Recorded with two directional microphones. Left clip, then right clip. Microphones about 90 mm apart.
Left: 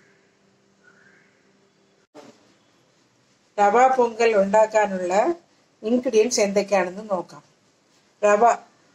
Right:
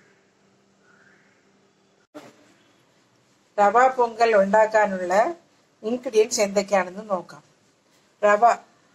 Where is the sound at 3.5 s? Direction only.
15° left (ahead or behind).